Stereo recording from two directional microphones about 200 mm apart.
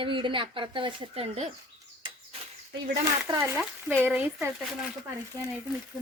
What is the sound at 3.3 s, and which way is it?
A woman's voice, 15° right (ahead or behind).